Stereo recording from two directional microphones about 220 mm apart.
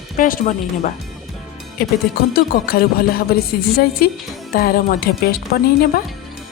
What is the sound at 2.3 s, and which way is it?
Music, 40° left (ahead or behind).